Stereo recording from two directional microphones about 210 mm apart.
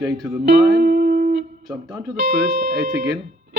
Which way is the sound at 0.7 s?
45° right (ahead or behind).